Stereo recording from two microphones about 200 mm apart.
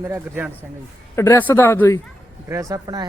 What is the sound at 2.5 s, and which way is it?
Speech, 15° right (ahead or behind).